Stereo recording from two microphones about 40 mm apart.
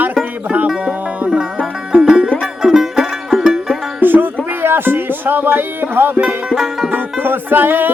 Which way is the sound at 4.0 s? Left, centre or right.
Right.